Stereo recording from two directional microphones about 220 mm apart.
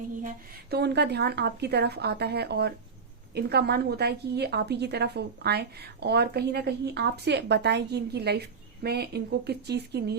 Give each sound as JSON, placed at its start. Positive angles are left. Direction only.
{"t": 0.7, "sound": "a woman's voice", "side_deg": -50}